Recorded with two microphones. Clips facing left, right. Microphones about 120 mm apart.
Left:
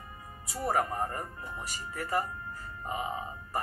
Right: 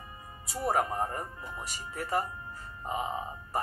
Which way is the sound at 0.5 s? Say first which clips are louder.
Right 1 dB; 25° right (ahead or behind).